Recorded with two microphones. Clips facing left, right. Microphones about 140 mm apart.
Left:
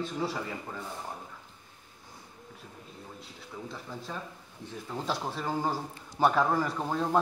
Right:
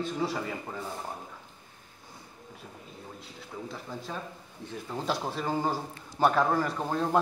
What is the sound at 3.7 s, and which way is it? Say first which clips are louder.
A man's voice: right 1 dB; 10° right (ahead or behind).